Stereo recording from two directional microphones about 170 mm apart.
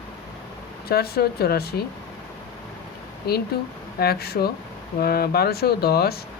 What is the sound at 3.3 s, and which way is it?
Speech, 65° left (ahead or behind).